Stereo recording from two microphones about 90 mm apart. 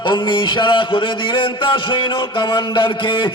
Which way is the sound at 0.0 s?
65° left (ahead or behind).